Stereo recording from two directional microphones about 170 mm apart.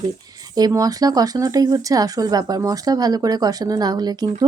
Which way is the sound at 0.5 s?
20° right (ahead or behind).